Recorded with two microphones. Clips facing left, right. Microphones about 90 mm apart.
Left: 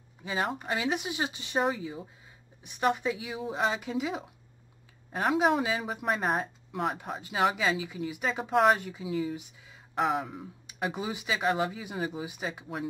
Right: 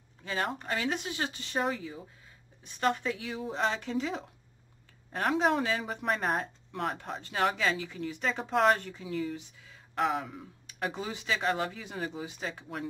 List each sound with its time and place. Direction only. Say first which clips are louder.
0.2 s speech: left 2 dB; 15° left (ahead or behind)
9.4 s a sound: left 1 dB; 15° left (ahead or behind)
10.0 s speech: left 1 dB; 5° left (ahead or behind)
10.3 s speech: left 3 dB; 15° left (ahead or behind)